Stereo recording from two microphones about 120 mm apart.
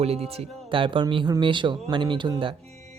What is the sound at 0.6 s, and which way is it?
Speech, 45° right (ahead or behind).